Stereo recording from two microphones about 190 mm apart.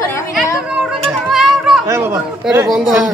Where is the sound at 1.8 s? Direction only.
15° right (ahead or behind).